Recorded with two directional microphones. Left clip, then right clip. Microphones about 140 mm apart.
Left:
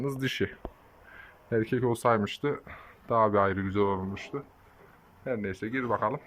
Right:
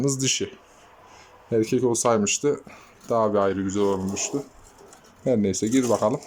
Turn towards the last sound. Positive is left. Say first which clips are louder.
# right 7 dB
turn(degrees=-25)  # may be behind; listen again after turning